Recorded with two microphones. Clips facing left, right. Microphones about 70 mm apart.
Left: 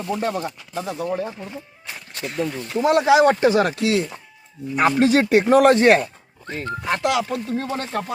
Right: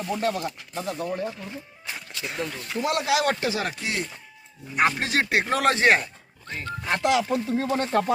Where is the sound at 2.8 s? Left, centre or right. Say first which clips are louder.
Left 9 dB; left.